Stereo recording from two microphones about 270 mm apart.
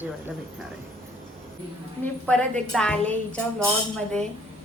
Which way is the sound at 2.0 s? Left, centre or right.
Centre.